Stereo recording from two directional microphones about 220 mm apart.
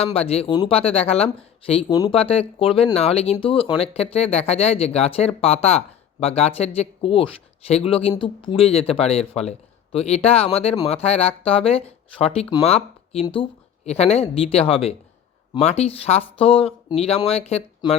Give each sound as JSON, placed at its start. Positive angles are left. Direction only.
{"t": 0.0, "sound": "speech", "side_deg": 25}